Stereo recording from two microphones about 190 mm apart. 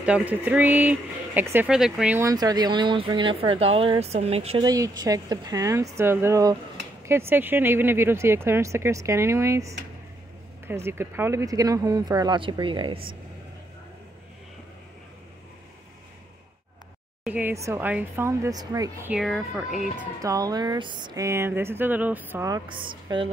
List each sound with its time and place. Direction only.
0.0 s speech: 5° right (ahead or behind)
2.1 s speech: 20° right (ahead or behind)
4.6 s speech: 20° right (ahead or behind)
17.2 s speech: 10° right (ahead or behind)
19.1 s speech: centre (ahead or behind)
20.2 s speech: 20° right (ahead or behind)